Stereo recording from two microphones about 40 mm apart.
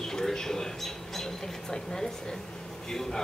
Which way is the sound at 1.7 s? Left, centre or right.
Centre.